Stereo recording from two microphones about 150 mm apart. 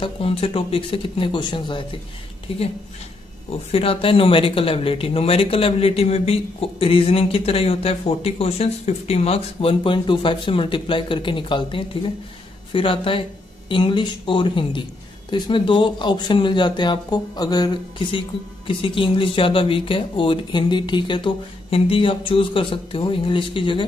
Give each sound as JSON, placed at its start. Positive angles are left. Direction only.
{"t": 0.0, "sound": "speech", "side_deg": 40}
{"t": 3.7, "sound": "speech", "side_deg": 40}